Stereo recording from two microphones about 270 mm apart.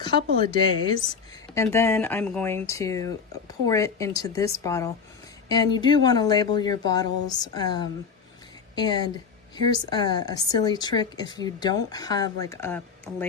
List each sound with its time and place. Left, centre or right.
0.2 s a woman's voice: right
1.5 s a woman's voice: centre